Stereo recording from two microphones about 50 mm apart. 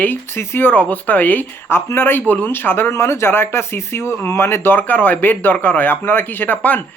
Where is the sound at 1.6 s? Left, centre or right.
Left.